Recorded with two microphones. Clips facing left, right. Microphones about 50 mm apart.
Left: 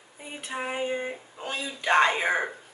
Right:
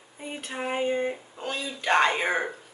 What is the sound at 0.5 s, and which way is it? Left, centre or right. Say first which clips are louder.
Female singing: right 2 dB; centre.